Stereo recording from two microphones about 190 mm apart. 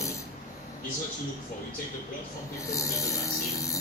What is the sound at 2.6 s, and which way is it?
Speech, 15° left (ahead or behind).